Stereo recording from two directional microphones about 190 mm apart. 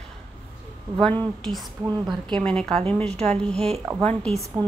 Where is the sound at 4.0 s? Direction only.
5° left (ahead or behind).